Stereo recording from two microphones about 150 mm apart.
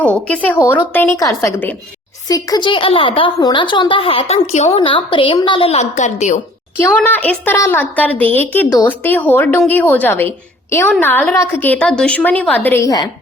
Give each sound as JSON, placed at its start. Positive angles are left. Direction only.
{"t": 0.0, "sound": "a woman's voice", "side_deg": 10}
{"t": 2.2, "sound": "a woman's voice", "side_deg": 25}
{"t": 6.7, "sound": "a woman's voice", "side_deg": 15}
{"t": 12.8, "sound": "a woman's voice", "side_deg": 25}